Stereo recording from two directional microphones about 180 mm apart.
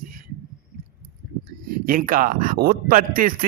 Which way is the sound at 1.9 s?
50° right (ahead or behind).